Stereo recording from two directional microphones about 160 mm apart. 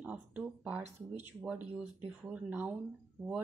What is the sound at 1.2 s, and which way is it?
A woman's voice, 10° right (ahead or behind).